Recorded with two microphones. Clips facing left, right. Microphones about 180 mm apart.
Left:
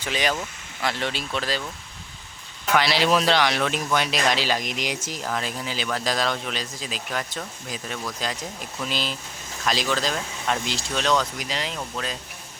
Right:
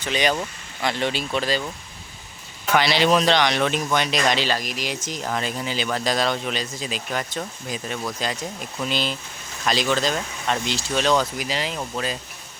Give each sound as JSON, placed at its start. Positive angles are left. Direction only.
{"t": 0.0, "sound": "speech", "side_deg": 0}
{"t": 2.7, "sound": "speech", "side_deg": 0}
{"t": 4.5, "sound": "speech", "side_deg": 20}
{"t": 5.0, "sound": "speech", "side_deg": 5}